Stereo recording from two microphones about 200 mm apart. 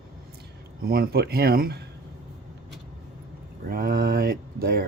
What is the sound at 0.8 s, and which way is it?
Speech, 50° right (ahead or behind).